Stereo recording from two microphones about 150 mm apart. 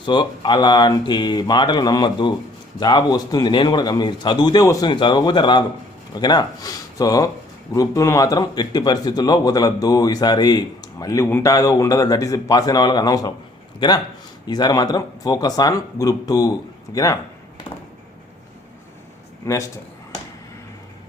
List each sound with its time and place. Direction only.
0.0 s a man's voice: 30° left (ahead or behind)
19.5 s a man's voice: 20° left (ahead or behind)